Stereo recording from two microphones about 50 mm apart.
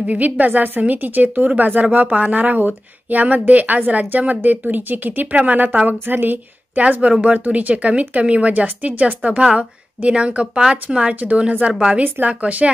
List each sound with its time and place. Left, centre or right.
0.0 s speech: right
5.3 s a woman's voice: right
5.8 s speech: right
6.9 s a woman's voice: right